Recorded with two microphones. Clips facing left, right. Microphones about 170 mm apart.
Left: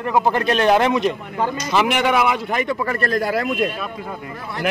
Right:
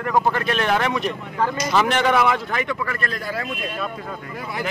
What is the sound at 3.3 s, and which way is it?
Speech, 65° left (ahead or behind).